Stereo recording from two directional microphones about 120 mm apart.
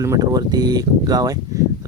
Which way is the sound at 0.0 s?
30° right (ahead or behind).